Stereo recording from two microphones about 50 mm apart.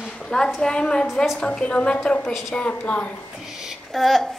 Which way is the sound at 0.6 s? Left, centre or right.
Centre.